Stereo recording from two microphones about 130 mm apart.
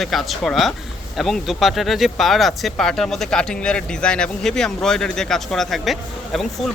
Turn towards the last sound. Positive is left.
turn(degrees=0)  # may be behind; listen again after turning